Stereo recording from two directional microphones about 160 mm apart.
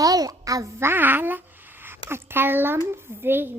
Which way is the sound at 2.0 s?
15° right (ahead or behind).